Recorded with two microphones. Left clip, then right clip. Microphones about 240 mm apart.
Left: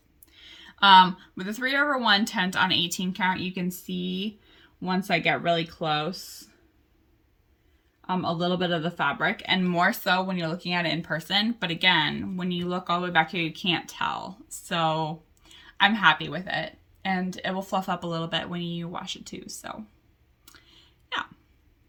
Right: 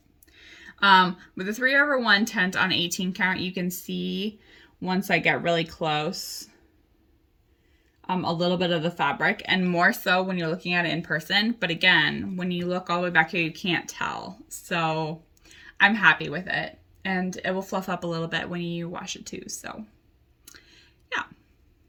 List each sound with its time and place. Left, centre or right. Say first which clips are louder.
0.3 s speech: right 1 dB; centre
6.1 s speech: right 6 dB; centre
8.0 s speech: right 2 dB; centre
14.7 s a sound: even; centre
16.2 s speech: right 2 dB; centre
20.5 s a sound: right 2 dB; centre